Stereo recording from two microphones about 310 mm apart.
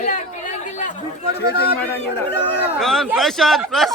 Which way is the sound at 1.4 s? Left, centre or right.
Left.